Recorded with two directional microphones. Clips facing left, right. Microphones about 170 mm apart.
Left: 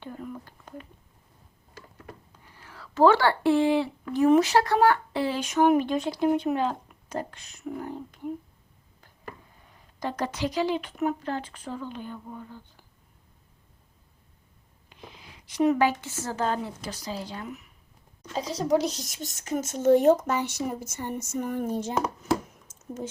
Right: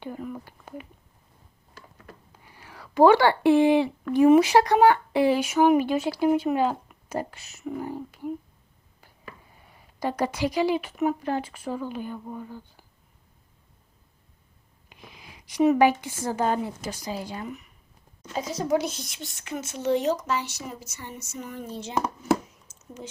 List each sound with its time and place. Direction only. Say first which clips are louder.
0.0 s a sound: right 3 dB; 5° right (ahead or behind)
2.4 s speech: right 1 dB; 10° right (ahead or behind)
9.7 s a woman's voice: right 3 dB; 10° right (ahead or behind)
14.8 s a sound: left 1 dB; 10° right (ahead or behind)
15.8 s a woman's voice: right 4 dB; 15° right (ahead or behind)
17.4 s speech: right 2 dB; centre (ahead or behind)
18.3 s a woman's voice: left 1 dB; 30° left (ahead or behind); by 21.9 s 50° left (ahead or behind)